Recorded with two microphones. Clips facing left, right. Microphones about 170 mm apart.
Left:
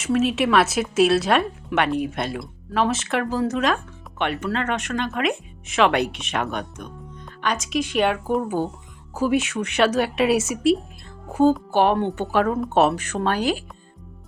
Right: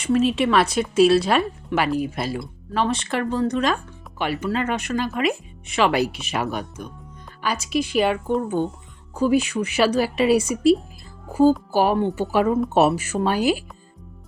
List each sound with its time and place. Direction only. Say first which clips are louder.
0.0 s speech: right 1 dB; centre (ahead or behind)